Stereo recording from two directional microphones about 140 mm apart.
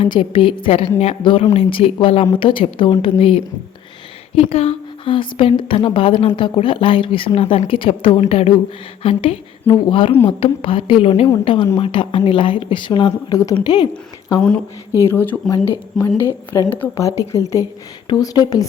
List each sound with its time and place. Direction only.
0.0 s a woman's voice: 40° left (ahead or behind)
14.9 s speech: 15° left (ahead or behind)
15.9 s a woman's voice: centre (ahead or behind)
16.5 s speech: 15° left (ahead or behind)